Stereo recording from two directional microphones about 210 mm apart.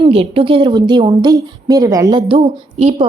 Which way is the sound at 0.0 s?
30° right (ahead or behind).